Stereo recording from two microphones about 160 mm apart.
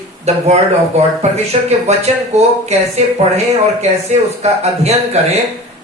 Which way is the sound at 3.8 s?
40° right (ahead or behind).